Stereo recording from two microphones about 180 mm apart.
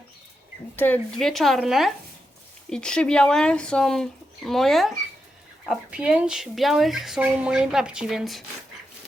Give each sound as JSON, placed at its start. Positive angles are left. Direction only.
{"t": 0.8, "sound": "speech", "side_deg": 5}